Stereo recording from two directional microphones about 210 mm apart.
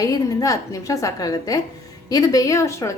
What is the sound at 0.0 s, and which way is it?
A woman's voice, 15° left (ahead or behind).